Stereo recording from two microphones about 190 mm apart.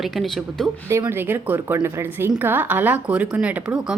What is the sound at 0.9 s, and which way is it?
A woman's voice, 15° right (ahead or behind).